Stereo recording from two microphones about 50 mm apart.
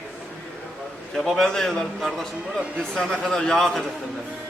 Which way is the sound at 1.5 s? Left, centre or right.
Centre.